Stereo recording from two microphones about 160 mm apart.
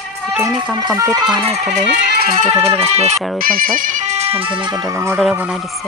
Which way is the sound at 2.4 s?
40° right (ahead or behind).